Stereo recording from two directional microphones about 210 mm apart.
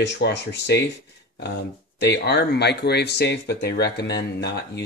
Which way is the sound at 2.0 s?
55° left (ahead or behind).